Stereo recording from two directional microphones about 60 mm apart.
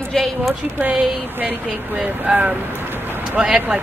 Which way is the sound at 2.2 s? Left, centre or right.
Centre.